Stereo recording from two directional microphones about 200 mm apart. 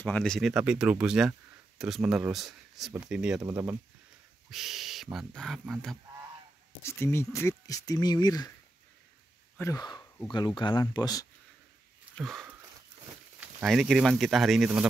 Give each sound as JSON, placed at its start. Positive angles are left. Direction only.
{"t": 0.0, "sound": "speech", "side_deg": 5}
{"t": 6.8, "sound": "speech", "side_deg": 15}
{"t": 9.6, "sound": "speech", "side_deg": 15}
{"t": 12.2, "sound": "wheeze", "side_deg": 0}
{"t": 13.4, "sound": "speech", "side_deg": -5}